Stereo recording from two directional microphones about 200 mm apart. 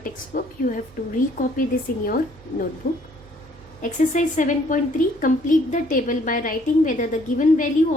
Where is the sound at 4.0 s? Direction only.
40° left (ahead or behind).